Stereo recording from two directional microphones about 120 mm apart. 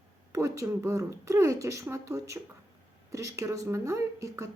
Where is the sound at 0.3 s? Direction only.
25° right (ahead or behind).